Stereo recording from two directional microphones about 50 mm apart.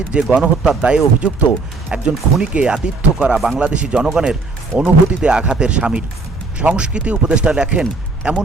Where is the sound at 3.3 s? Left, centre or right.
Centre.